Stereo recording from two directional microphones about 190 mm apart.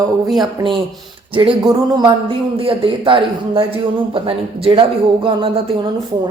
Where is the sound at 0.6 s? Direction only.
15° right (ahead or behind).